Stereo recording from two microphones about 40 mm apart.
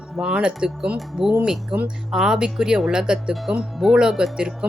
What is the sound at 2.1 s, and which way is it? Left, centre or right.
Speech, centre.